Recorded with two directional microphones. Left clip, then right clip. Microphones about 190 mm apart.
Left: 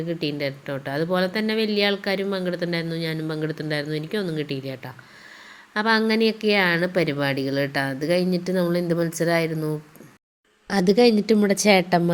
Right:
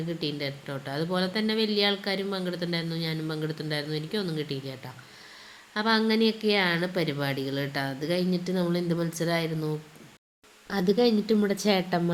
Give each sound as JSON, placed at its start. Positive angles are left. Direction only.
{"t": 0.1, "sound": "speech", "side_deg": 10}
{"t": 10.7, "sound": "a woman's voice", "side_deg": 45}